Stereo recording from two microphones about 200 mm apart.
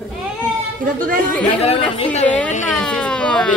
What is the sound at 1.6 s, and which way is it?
Speech, 30° left (ahead or behind).